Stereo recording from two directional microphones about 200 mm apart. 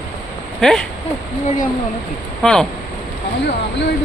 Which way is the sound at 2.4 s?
Centre (ahead or behind).